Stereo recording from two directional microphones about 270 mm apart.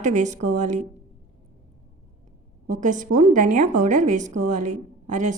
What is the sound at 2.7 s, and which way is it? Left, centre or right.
A woman's voice, right.